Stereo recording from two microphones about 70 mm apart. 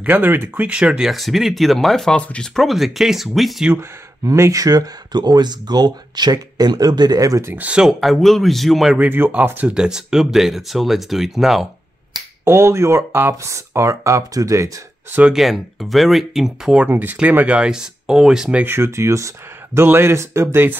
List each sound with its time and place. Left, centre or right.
0.0 s speech: right
0.7 s speech: centre
2.1 s speech: centre
2.6 s speech: centre
3.7 s speech: right
7.5 s speech: right
7.8 s speech: centre
8.9 s speech: right
9.8 s speech: centre
12.4 s speech: right
15.3 s speech: centre
16.9 s speech: right
17.6 s speech: centre
18.6 s speech: right